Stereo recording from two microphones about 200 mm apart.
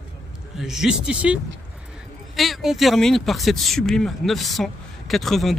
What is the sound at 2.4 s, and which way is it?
Speech, centre (ahead or behind).